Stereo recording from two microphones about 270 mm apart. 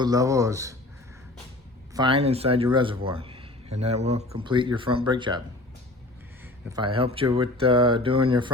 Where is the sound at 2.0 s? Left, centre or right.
Centre.